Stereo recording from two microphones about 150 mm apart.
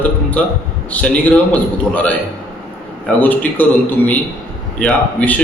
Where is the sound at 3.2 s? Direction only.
10° left (ahead or behind).